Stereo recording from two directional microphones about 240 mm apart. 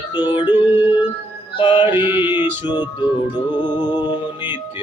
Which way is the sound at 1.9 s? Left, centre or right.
Centre.